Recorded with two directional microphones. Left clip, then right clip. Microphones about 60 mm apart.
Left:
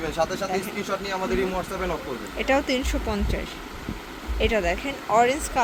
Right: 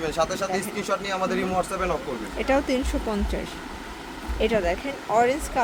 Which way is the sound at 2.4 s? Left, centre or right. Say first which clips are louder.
Even; right.